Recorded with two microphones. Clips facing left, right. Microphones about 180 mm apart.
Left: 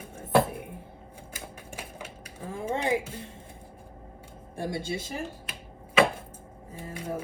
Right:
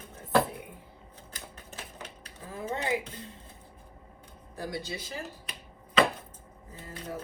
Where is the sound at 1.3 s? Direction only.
10° left (ahead or behind).